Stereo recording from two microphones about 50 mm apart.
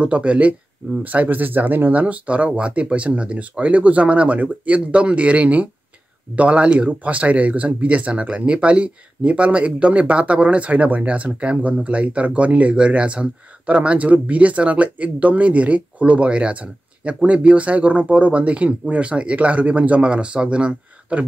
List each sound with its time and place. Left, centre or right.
0.0 s speech: right